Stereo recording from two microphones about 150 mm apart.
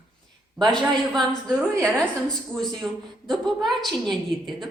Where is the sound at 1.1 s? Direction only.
Centre (ahead or behind).